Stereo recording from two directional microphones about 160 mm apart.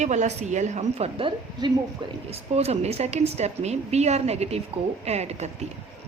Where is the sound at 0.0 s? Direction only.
45° right (ahead or behind).